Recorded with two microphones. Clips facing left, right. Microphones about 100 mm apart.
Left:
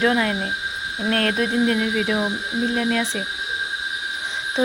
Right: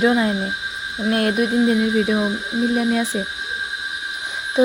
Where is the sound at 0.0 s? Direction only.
15° right (ahead or behind).